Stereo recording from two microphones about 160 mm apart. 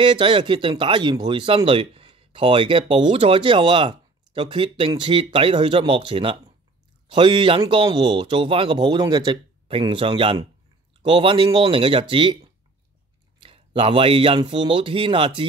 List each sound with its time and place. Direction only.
0.0 s speech: 30° right (ahead or behind)
13.4 s speech: 35° right (ahead or behind)